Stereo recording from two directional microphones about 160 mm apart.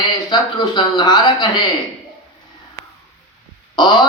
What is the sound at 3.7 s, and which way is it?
Speech, 30° left (ahead or behind).